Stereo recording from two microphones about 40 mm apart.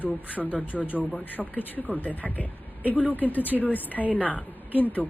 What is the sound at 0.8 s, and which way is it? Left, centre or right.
A woman's voice, left.